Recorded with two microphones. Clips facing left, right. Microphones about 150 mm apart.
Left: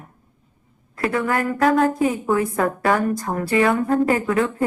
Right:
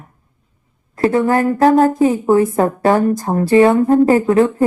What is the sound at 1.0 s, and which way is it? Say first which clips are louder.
A woman's voice: right 8 dB; 30° right (ahead or behind).